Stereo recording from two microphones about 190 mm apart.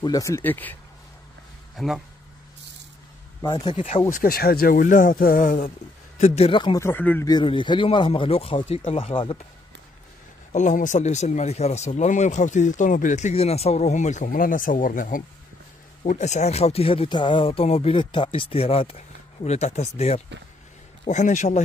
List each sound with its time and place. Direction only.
0.0 s speech: 15° left (ahead or behind)
1.8 s speech: centre (ahead or behind)
3.4 s speech: 20° left (ahead or behind)
3.7 s speech: 40° left (ahead or behind); by 7.2 s 10° left (ahead or behind)
7.2 s speech: 25° left (ahead or behind)
10.5 s speech: 40° left (ahead or behind)